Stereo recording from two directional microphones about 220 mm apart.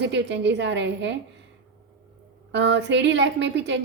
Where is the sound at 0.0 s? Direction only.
55° right (ahead or behind).